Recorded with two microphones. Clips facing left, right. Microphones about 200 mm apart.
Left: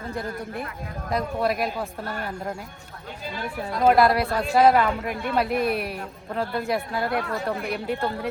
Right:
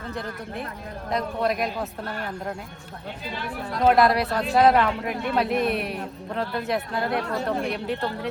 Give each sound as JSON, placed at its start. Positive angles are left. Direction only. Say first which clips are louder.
{"t": 1.1, "sound": "speech", "louder": "even", "side_deg": 5}
{"t": 3.8, "sound": "speech", "louder": "even", "side_deg": 0}